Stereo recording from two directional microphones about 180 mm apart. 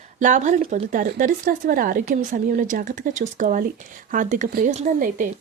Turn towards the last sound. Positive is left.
turn(degrees=-50)  # may be behind; listen again after turning